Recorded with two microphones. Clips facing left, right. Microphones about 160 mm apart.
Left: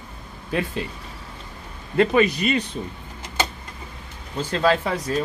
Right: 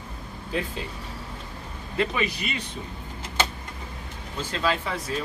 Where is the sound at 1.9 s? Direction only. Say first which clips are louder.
Left 9 dB; 50° left (ahead or behind).